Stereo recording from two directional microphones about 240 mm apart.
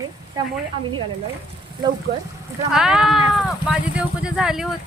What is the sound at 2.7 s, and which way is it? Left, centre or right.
Speech, centre.